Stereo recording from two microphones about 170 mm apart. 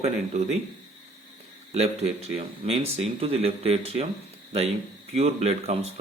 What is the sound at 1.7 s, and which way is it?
Speech, 40° right (ahead or behind).